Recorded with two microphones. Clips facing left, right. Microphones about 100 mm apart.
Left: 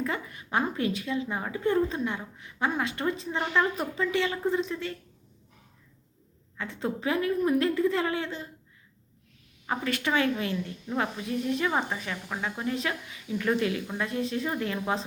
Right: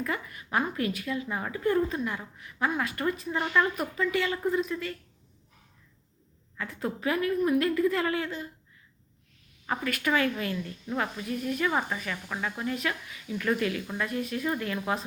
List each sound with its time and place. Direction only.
0.0 s speech: 30° left (ahead or behind)
6.6 s speech: 25° left (ahead or behind)
9.6 s speech: 30° left (ahead or behind)